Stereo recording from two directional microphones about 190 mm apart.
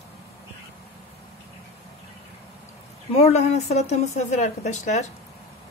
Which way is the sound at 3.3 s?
35° left (ahead or behind).